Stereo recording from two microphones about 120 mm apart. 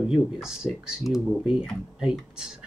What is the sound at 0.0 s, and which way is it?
Speech, 5° right (ahead or behind).